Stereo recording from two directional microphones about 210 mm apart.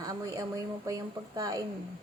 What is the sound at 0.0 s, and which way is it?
A woman's voice, 15° right (ahead or behind).